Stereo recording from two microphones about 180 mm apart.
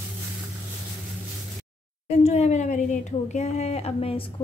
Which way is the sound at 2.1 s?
35° left (ahead or behind).